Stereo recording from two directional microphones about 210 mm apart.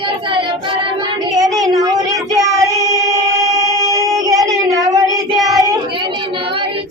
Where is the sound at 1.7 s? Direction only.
15° right (ahead or behind).